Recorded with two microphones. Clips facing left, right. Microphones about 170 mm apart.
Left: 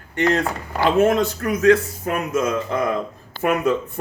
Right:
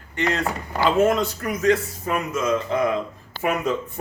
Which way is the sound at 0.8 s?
60° left (ahead or behind).